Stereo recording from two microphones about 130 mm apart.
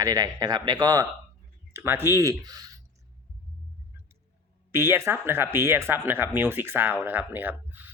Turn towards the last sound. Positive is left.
turn(degrees=-15)  # may be behind; listen again after turning